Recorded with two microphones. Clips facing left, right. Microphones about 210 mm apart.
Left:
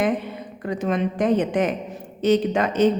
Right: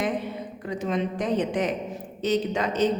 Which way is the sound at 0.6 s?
60° left (ahead or behind).